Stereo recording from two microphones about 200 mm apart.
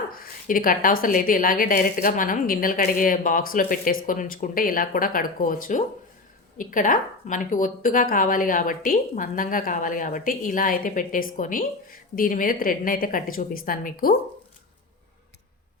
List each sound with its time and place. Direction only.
0.1 s a woman's voice: 45° left (ahead or behind)